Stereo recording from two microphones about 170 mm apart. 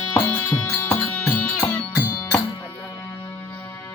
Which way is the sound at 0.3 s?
10° left (ahead or behind).